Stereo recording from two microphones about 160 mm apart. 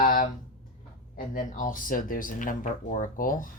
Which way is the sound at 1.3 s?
55° left (ahead or behind).